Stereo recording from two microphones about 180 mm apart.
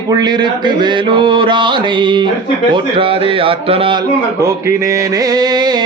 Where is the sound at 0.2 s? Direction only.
25° right (ahead or behind).